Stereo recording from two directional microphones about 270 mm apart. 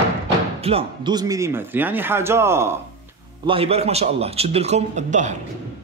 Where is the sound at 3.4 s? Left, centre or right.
Right.